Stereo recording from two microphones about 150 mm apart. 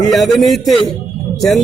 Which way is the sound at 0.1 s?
Centre (ahead or behind).